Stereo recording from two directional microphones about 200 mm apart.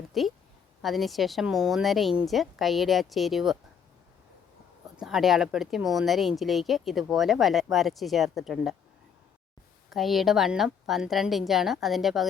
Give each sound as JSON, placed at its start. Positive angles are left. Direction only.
{"t": 0.1, "sound": "a woman's voice", "side_deg": 0}
{"t": 4.9, "sound": "speech", "side_deg": 0}
{"t": 9.9, "sound": "speech", "side_deg": 0}